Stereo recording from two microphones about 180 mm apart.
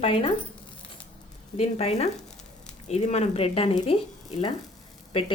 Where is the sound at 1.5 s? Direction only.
35° left (ahead or behind).